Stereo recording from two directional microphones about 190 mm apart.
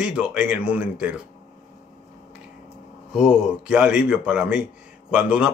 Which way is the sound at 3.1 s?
5° right (ahead or behind).